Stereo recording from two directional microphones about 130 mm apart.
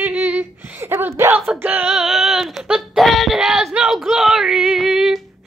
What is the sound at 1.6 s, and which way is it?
Female singing, 15° right (ahead or behind).